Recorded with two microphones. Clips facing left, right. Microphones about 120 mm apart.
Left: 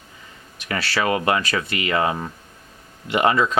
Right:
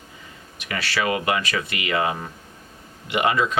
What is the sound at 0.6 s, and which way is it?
Speech, 35° left (ahead or behind).